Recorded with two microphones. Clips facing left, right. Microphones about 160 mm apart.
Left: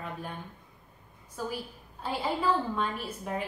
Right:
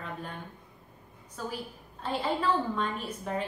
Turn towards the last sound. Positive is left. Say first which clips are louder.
# right 1 dB
turn(degrees=10)  # may be behind; listen again after turning